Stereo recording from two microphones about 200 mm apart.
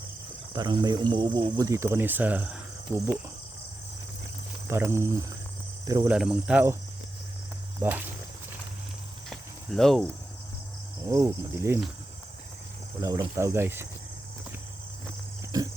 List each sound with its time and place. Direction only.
0.5 s speech: 20° right (ahead or behind); by 3.2 s 5° right (ahead or behind)
4.7 s speech: 10° right (ahead or behind)
6.1 s speech: 5° right (ahead or behind)
7.8 s speech: 10° right (ahead or behind)
9.3 s cricket: centre (ahead or behind)
11.1 s speech: 15° right (ahead or behind)
13.0 s speech: 15° right (ahead or behind)
15.5 s pig: 20° right (ahead or behind)